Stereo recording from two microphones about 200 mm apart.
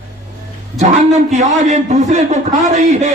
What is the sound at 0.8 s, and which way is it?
A man's voice, 35° right (ahead or behind).